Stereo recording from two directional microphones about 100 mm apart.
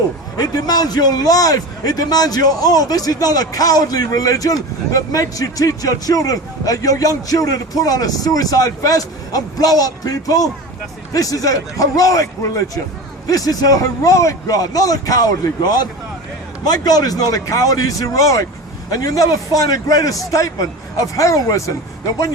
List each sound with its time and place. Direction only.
0.3 s a man's voice: 40° left (ahead or behind)